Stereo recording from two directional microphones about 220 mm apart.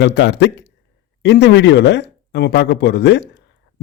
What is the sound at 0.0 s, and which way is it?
A man's voice, 50° left (ahead or behind).